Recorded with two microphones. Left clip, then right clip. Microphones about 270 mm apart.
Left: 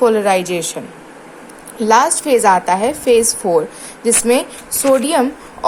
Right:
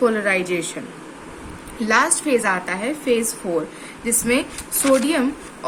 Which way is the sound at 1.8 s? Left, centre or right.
Centre.